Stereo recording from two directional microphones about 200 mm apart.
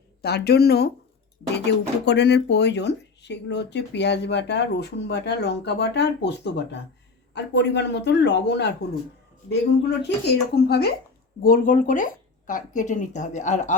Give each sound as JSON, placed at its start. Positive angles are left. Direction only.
{"t": 0.2, "sound": "speech", "side_deg": 55}
{"t": 10.0, "sound": "speech", "side_deg": 55}